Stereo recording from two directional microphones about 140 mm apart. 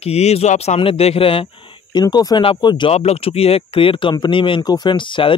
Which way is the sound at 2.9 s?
45° left (ahead or behind).